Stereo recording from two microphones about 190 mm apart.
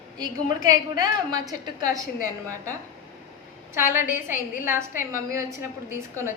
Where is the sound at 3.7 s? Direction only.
10° right (ahead or behind).